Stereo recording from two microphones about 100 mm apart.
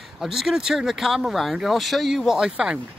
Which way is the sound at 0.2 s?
5° right (ahead or behind).